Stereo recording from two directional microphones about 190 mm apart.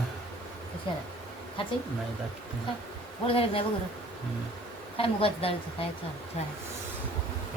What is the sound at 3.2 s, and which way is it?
Speech, 30° left (ahead or behind).